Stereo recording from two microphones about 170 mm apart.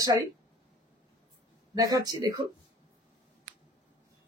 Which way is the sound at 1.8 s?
20° right (ahead or behind).